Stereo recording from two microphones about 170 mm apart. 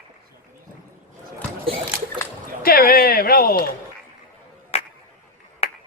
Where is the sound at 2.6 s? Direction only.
60° left (ahead or behind).